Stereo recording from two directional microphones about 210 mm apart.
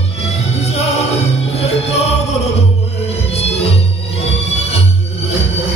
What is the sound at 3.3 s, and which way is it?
Music, 30° left (ahead or behind).